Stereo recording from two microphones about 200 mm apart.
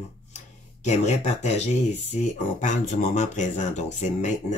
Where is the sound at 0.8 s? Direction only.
35° left (ahead or behind).